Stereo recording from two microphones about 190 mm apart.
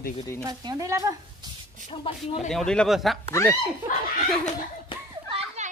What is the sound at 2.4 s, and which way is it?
Speech, 5° left (ahead or behind).